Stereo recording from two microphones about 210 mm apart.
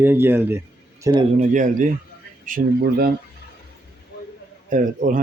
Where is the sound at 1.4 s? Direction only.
35° right (ahead or behind).